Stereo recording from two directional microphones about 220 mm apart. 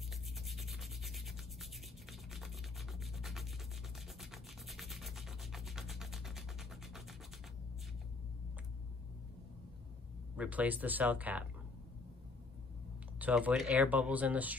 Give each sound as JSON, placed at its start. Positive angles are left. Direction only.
{"t": 0.5, "sound": "rub", "side_deg": 0}
{"t": 10.3, "sound": "speech", "side_deg": -5}
{"t": 13.2, "sound": "speech", "side_deg": -5}